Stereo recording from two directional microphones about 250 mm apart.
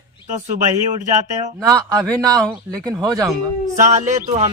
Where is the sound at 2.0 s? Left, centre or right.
Centre.